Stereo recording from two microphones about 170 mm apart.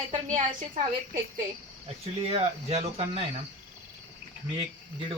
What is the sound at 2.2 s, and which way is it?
Speech, 35° right (ahead or behind).